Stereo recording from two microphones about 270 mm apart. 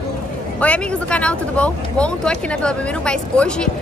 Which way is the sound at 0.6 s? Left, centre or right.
Centre.